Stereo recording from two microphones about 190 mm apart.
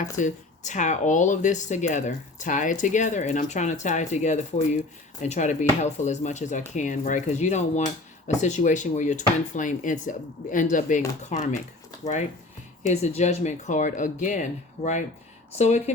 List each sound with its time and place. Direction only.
0.0 s speech: 40° left (ahead or behind)
12.8 s speech: 35° left (ahead or behind)
15.5 s speech: 35° left (ahead or behind)